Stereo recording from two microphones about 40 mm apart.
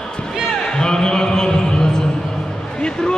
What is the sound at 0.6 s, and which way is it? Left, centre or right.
Music, centre.